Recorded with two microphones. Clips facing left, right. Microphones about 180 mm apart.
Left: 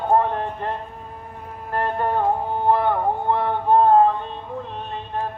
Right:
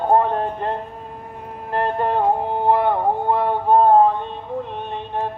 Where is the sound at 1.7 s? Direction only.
25° right (ahead or behind).